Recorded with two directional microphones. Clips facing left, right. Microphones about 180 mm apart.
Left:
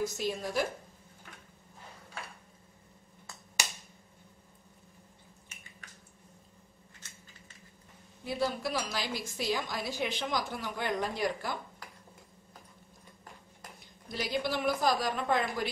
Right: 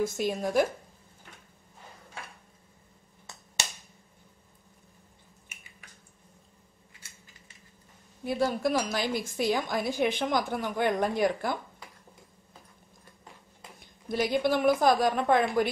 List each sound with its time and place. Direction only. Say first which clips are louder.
0.0 s a woman's voice: right 5 dB; 50° right (ahead or behind)
5.5 s drip: left 1 dB; 10° right (ahead or behind)
8.2 s a woman's voice: right 5 dB; 50° right (ahead or behind)
14.1 s a woman's voice: right 7 dB; 50° right (ahead or behind)